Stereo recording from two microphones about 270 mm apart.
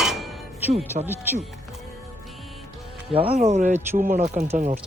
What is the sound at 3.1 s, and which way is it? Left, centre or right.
Speech, right.